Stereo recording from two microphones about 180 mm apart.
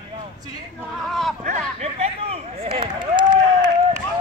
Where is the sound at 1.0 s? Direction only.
Centre (ahead or behind).